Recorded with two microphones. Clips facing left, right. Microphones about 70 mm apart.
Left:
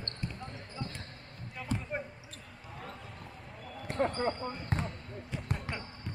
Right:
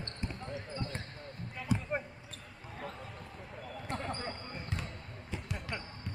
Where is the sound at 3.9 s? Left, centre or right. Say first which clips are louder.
Left 9 dB; left.